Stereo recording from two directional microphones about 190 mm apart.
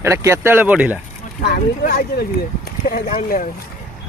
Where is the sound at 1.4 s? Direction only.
50° left (ahead or behind).